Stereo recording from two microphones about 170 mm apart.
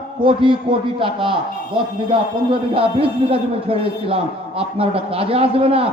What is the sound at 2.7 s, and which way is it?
Speech, 30° right (ahead or behind).